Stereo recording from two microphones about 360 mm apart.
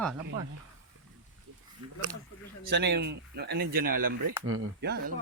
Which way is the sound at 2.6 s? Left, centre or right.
Right.